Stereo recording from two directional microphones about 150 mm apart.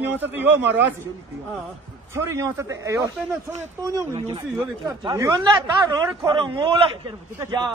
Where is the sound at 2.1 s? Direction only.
20° right (ahead or behind).